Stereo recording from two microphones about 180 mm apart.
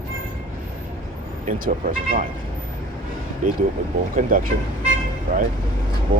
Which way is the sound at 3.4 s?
45° right (ahead or behind).